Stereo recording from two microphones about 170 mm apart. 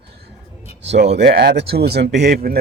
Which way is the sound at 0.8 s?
90° right.